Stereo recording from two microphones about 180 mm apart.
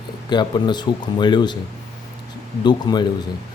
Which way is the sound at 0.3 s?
25° left (ahead or behind).